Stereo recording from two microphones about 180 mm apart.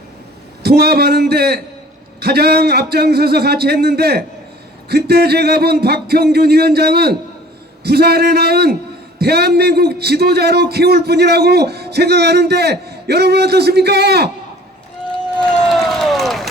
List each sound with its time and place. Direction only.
0.6 s a man's voice: 60° right (ahead or behind)
15.7 s run: centre (ahead or behind)